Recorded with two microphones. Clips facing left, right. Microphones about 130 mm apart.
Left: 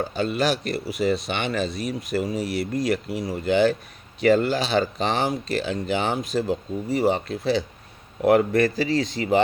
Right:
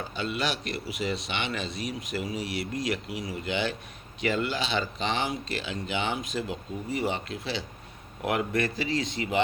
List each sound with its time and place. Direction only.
0.0 s speech: 45° left (ahead or behind)